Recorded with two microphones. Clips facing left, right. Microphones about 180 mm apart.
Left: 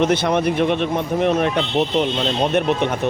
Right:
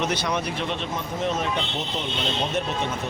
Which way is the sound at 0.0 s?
55° left (ahead or behind).